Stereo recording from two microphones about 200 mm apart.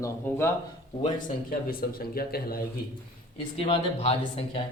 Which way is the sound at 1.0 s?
45° left (ahead or behind).